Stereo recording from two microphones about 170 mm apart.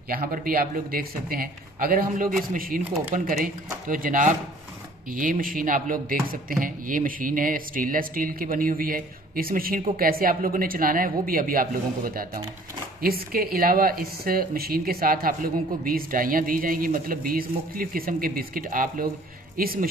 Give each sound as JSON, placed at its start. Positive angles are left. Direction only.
{"t": 0.1, "sound": "speech", "side_deg": -55}